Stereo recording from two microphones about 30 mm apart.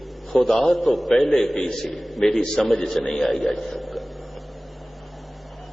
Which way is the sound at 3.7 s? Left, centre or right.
Centre.